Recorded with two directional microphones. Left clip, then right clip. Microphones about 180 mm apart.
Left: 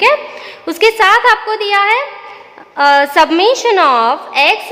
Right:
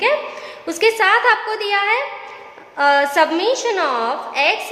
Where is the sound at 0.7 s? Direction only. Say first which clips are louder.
Left 6 dB; 30° left (ahead or behind).